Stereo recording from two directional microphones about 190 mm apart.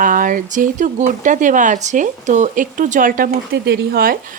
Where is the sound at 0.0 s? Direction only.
45° right (ahead or behind).